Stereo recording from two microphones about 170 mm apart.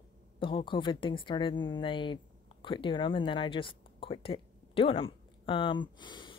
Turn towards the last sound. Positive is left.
turn(degrees=25)  # may be behind; listen again after turning